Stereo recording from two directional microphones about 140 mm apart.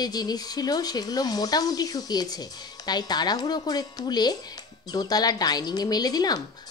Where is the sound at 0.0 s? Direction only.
30° left (ahead or behind).